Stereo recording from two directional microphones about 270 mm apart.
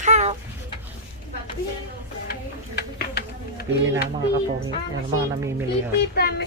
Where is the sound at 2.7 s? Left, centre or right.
Left.